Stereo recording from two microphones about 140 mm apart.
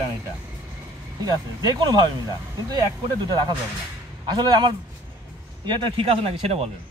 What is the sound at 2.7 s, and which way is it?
Speech, 30° right (ahead or behind).